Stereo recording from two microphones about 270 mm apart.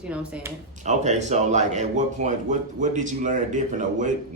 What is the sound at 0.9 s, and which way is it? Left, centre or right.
Speech, right.